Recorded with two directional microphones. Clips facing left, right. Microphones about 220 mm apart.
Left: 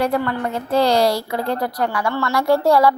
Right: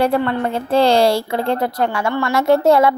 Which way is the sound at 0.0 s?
25° right (ahead or behind).